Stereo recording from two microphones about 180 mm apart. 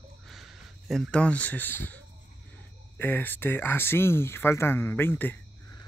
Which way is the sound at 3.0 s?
10° left (ahead or behind).